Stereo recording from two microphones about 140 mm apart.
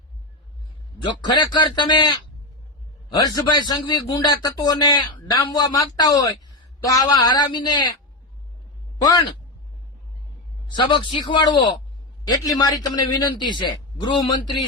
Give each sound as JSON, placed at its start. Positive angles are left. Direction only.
{"t": 1.0, "sound": "a man's voice", "side_deg": 30}
{"t": 9.0, "sound": "speech", "side_deg": 25}
{"t": 10.7, "sound": "speech", "side_deg": 35}